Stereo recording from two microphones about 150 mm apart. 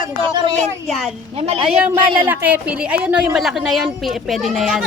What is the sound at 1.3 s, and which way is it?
Speech, 40° right (ahead or behind).